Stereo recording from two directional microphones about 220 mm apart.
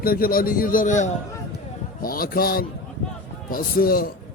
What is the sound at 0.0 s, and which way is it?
A man's voice, 40° left (ahead or behind).